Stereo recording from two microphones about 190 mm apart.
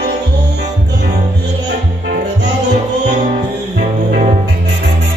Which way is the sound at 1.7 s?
65° right (ahead or behind).